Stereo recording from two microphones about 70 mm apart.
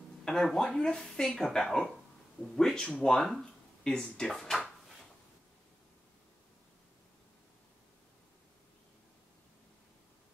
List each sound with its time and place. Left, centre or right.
0.2 s speech: centre